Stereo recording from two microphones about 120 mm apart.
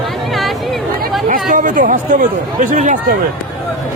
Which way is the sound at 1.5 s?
90° right.